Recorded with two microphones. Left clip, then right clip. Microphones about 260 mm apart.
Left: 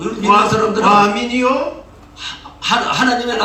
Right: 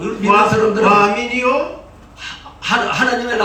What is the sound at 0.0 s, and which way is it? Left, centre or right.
A man's voice, left.